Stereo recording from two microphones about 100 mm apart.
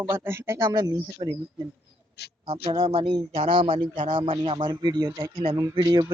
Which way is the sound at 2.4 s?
70° right (ahead or behind).